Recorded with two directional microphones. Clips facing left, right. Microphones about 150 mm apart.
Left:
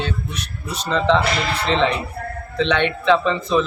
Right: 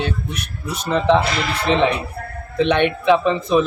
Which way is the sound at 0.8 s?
15° right (ahead or behind).